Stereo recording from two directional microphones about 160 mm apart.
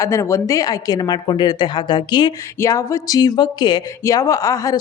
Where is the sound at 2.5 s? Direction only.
15° left (ahead or behind).